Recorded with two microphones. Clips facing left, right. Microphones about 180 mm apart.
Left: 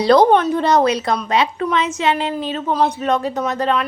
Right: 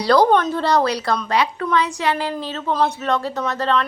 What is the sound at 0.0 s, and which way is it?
A woman's voice, 20° left (ahead or behind).